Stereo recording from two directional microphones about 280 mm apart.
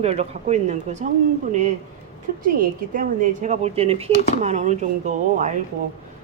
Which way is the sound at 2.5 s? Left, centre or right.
Right.